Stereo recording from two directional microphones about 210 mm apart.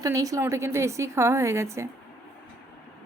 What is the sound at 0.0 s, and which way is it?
A woman's voice, 15° right (ahead or behind).